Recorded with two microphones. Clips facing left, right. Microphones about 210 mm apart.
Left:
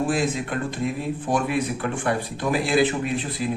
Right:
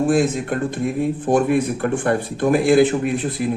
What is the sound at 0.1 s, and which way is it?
Speech, 50° right (ahead or behind).